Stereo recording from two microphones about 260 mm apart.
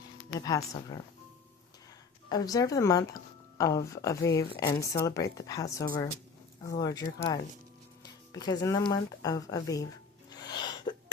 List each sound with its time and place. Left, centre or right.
0.3 s speech: centre
2.3 s speech: centre
10.2 s a sound: centre